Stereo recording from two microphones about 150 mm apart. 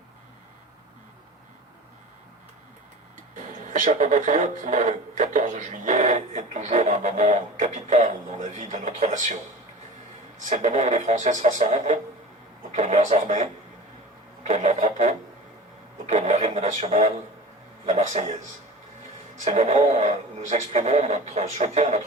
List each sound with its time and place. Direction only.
3.3 s speech: 55° right (ahead or behind)
10.5 s speech: 50° right (ahead or behind)
19.5 s speech: 50° right (ahead or behind)